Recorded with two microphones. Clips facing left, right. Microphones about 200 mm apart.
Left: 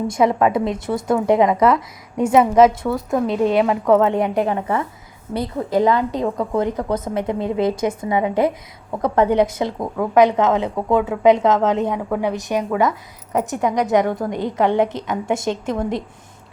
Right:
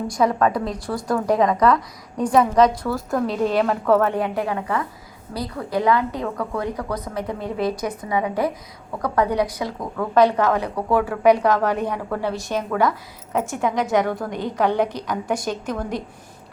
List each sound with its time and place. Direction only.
0.1 s a woman's voice: 25° left (ahead or behind)
2.4 s a woman's voice: 5° left (ahead or behind)
3.8 s a woman's voice: 20° left (ahead or behind)
13.6 s a woman's voice: centre (ahead or behind)
14.3 s a woman's voice: 20° left (ahead or behind)